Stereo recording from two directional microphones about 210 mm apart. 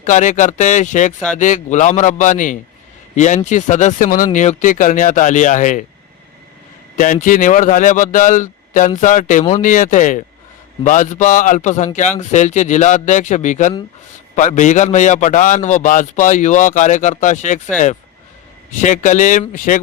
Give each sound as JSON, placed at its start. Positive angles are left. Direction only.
{"t": 0.0, "sound": "a man's voice", "side_deg": 35}
{"t": 6.9, "sound": "a man's voice", "side_deg": 40}
{"t": 18.8, "sound": "a man's voice", "side_deg": 35}